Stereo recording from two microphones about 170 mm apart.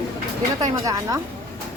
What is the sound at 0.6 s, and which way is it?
Speech, 20° right (ahead or behind).